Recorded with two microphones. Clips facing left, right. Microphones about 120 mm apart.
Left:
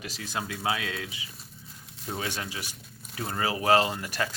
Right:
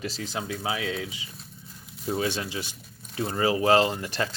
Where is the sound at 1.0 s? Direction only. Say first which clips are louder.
Right 3 dB; 25° right (ahead or behind).